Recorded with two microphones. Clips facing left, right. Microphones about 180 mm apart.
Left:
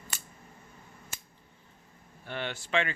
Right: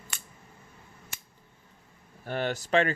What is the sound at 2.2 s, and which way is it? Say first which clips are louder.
Speech: right 6 dB; 40° right (ahead or behind).